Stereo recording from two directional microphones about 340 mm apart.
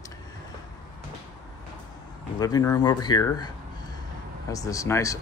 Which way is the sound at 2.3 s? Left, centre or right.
Centre.